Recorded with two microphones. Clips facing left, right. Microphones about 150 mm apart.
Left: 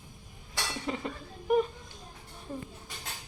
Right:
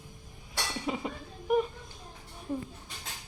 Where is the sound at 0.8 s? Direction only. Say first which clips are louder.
Right 1 dB; 15° right (ahead or behind).